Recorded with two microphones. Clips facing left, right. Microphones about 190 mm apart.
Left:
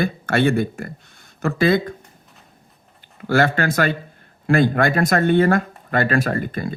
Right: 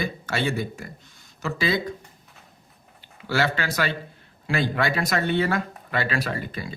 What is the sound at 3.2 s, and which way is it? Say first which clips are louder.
Speech: left 7 dB; 50° left (ahead or behind).